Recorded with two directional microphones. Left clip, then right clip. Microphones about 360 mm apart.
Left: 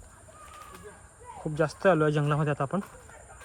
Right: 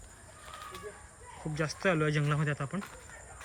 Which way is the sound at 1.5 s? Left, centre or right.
Centre.